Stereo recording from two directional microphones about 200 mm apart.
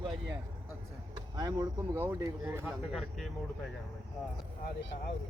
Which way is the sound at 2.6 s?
Centre (ahead or behind).